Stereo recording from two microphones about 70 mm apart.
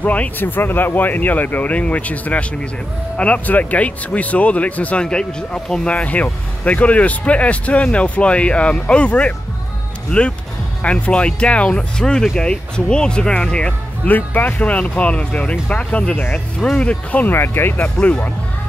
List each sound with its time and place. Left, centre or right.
0.0 s speech: left
5.0 s speech: centre
14.0 s speech: left
17.3 s speech: left
17.7 s speech: centre